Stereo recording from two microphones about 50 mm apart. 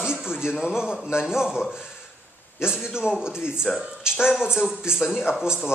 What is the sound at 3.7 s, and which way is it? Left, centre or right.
Speech, centre.